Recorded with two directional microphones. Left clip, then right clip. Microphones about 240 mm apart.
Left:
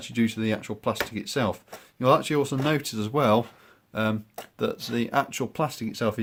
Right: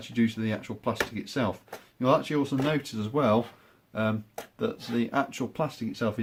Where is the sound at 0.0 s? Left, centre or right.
Left.